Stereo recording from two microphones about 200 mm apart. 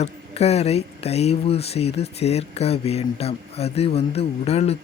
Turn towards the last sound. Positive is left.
turn(degrees=30)  # may be behind; listen again after turning